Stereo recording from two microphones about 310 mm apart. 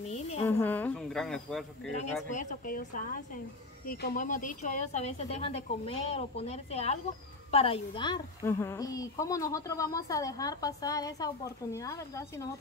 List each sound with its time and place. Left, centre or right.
0.1 s a sound: left
0.5 s speech: centre
1.9 s a woman's voice: left